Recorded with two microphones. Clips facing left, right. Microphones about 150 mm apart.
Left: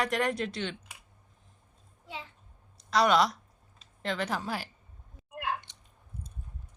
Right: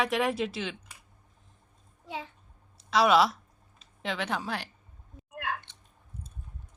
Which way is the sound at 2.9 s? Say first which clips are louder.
Right 2 dB; 5° right (ahead or behind).